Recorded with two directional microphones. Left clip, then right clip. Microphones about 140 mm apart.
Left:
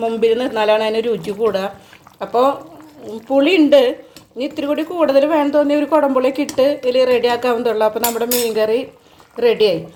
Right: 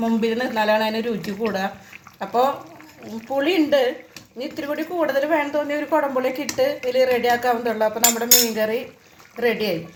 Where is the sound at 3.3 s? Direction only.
45° left (ahead or behind).